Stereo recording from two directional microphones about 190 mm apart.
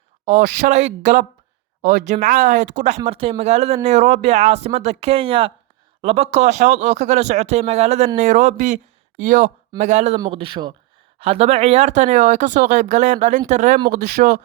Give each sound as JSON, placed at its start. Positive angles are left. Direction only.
{"t": 0.6, "sound": "speech", "side_deg": -35}